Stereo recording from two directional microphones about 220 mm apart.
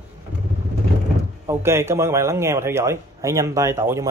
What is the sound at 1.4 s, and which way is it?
A man's voice, 10° right (ahead or behind).